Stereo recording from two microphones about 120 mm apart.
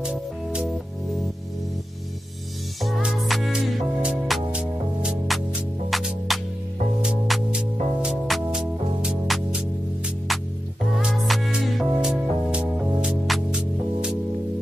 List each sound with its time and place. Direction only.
0.0 s music: 10° right (ahead or behind)
2.8 s music: 5° right (ahead or behind)